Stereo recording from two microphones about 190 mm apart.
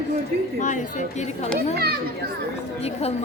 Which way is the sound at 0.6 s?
40° left (ahead or behind).